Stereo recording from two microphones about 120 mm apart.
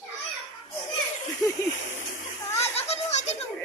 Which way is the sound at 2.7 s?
60° left (ahead or behind).